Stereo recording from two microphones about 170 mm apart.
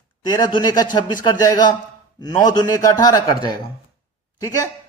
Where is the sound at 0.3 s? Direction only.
25° left (ahead or behind).